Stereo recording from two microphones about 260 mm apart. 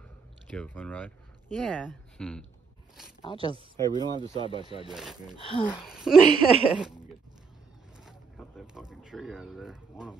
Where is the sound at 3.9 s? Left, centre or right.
Centre.